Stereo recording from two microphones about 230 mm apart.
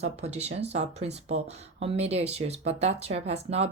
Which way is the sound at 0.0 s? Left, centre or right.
Right.